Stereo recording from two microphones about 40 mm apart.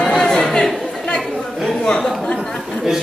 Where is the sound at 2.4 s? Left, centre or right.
Centre.